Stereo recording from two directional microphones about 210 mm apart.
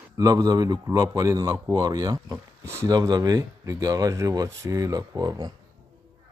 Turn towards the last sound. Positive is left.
turn(degrees=-20)  # may be behind; listen again after turning